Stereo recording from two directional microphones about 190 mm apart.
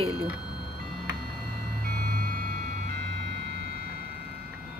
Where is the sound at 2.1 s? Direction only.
50° right (ahead or behind).